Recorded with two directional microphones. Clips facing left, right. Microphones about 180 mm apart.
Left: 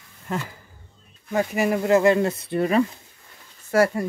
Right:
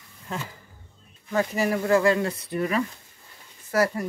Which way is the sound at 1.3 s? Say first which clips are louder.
Left 2 dB; 15° left (ahead or behind).